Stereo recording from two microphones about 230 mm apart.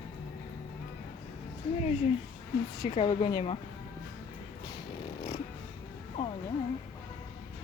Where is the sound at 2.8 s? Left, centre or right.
Left.